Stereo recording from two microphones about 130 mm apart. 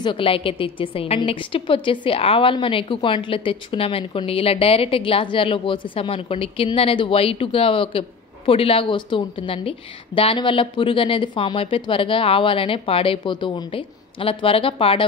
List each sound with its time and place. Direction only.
0.0 s a woman's voice: 40° left (ahead or behind)